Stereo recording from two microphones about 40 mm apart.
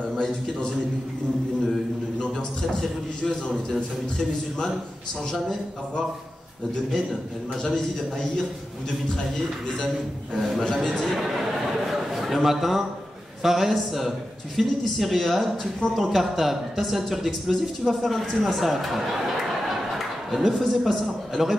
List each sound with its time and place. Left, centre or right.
0.2 s a man's voice: centre
3.7 s a man's voice: centre
7.6 s a man's voice: centre
10.3 s a man's voice: centre
10.8 s a man's voice: centre